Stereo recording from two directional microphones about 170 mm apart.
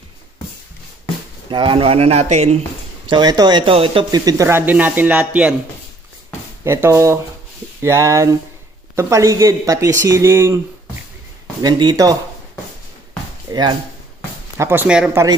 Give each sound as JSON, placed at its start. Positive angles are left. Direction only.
{"t": 1.5, "sound": "speech", "side_deg": -30}
{"t": 3.1, "sound": "speech", "side_deg": -25}
{"t": 6.6, "sound": "speech", "side_deg": -15}
{"t": 11.6, "sound": "speech", "side_deg": -25}
{"t": 13.5, "sound": "speech", "side_deg": -25}
{"t": 14.6, "sound": "speech", "side_deg": -10}